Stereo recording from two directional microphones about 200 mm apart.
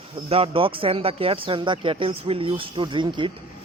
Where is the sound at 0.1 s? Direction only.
30° right (ahead or behind).